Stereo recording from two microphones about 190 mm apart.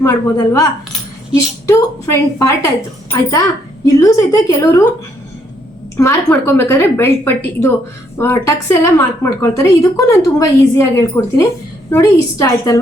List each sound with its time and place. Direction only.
0.0 s a woman's voice: 15° left (ahead or behind)
3.8 s a woman's voice: 15° left (ahead or behind)
6.0 s a woman's voice: 15° left (ahead or behind)